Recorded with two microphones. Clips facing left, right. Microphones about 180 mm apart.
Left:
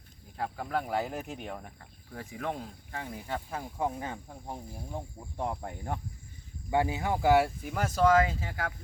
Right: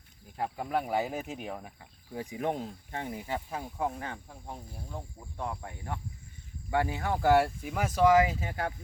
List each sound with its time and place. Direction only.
0.3 s speech: 15° right (ahead or behind)
2.4 s speech: 25° right (ahead or behind)
3.1 s speech: 10° right (ahead or behind)
3.5 s speech: centre (ahead or behind)
4.0 s speech: 15° left (ahead or behind)
5.4 s speech: 35° left (ahead or behind)
6.7 s speech: 20° left (ahead or behind); by 8.7 s 20° right (ahead or behind)